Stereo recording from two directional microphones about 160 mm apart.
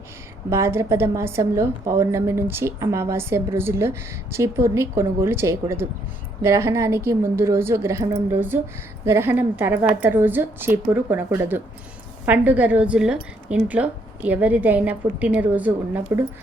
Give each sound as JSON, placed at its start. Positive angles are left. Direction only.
{"t": 0.5, "sound": "a woman's voice", "side_deg": -15}